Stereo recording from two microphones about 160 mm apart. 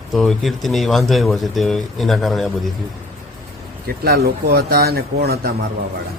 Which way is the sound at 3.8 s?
75° right (ahead or behind).